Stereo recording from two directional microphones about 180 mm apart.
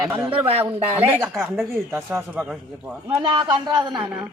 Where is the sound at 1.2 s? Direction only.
Centre (ahead or behind).